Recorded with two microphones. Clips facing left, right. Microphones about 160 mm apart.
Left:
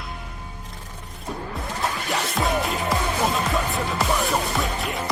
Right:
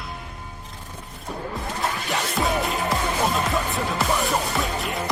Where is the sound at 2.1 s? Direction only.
Centre (ahead or behind).